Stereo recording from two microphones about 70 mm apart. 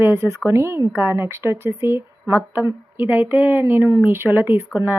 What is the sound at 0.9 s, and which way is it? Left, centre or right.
Speech, right.